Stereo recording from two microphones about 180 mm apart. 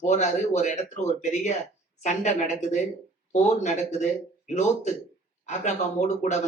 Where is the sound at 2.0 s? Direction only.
40° left (ahead or behind).